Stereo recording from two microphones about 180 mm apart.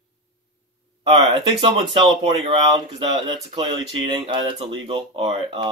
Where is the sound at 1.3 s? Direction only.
30° right (ahead or behind).